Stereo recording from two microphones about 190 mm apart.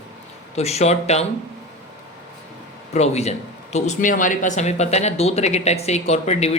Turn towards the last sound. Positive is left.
turn(degrees=35)  # may be behind; listen again after turning